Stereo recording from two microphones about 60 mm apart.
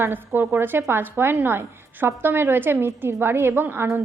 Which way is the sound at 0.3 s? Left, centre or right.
Right.